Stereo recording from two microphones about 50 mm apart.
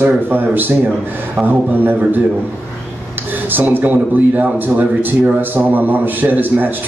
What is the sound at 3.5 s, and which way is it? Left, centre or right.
Speech, right.